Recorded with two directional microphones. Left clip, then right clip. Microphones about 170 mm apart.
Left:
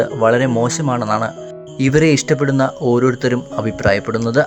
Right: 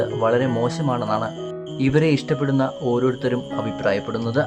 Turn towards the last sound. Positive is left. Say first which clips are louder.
# left 7 dB
turn(degrees=20)  # may be behind; listen again after turning